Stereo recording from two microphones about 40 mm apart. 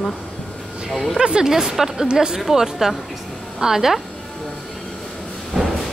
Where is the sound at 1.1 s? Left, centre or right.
Centre.